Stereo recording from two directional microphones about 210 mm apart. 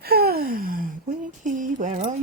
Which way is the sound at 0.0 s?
45° right (ahead or behind).